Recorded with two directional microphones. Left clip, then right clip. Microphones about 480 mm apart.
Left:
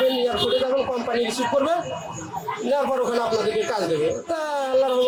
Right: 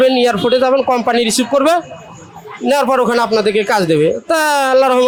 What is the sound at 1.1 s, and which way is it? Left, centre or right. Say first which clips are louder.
A man's voice: right 8 dB; right.